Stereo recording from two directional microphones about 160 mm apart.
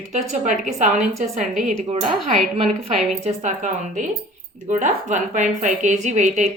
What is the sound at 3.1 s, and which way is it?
A woman's voice, 45° right (ahead or behind).